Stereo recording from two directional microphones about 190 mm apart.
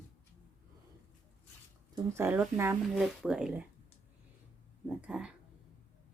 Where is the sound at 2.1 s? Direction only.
10° right (ahead or behind).